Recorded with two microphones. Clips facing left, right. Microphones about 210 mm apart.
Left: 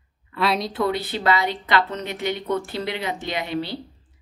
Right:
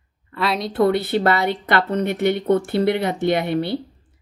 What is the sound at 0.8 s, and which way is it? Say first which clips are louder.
Speech: right 5 dB; 60° right (ahead or behind).